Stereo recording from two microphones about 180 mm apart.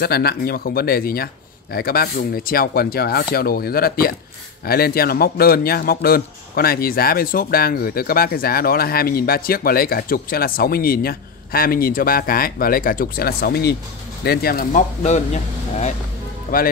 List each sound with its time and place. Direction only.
0.0 s a man's voice: 60° left (ahead or behind); by 15.9 s 40° left (ahead or behind)
16.5 s speech: 50° left (ahead or behind)